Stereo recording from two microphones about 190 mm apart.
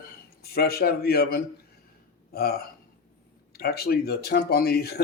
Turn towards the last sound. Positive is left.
turn(degrees=55)  # may be behind; listen again after turning